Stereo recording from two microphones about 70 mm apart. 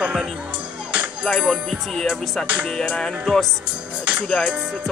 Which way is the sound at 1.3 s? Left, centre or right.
Centre.